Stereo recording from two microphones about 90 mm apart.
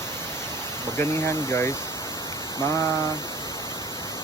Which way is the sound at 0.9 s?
25° left (ahead or behind).